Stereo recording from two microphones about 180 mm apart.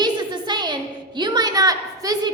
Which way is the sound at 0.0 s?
25° right (ahead or behind).